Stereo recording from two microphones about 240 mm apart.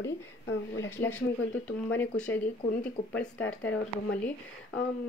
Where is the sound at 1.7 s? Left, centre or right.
Centre.